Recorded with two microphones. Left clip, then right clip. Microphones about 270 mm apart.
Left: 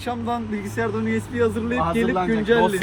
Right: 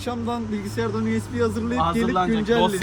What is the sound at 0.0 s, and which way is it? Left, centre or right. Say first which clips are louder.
Speech: left 2 dB; centre.